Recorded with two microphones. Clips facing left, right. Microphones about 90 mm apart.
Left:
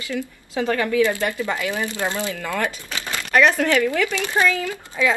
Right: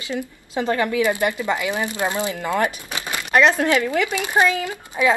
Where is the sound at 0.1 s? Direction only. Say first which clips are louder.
Right 1 dB; 20° right (ahead or behind).